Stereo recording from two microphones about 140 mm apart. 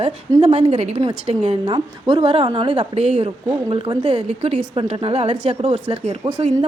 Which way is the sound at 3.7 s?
40° right (ahead or behind).